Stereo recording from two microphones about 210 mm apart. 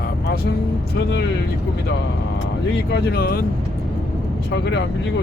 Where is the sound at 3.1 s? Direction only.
45° left (ahead or behind).